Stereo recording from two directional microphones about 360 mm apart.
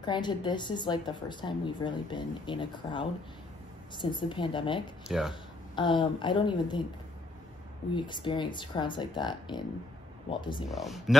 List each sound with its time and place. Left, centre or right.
0.0 s a woman's voice: centre
5.0 s speech: centre
5.3 s a woman's voice: centre
7.9 s a woman's voice: centre
10.7 s speech: centre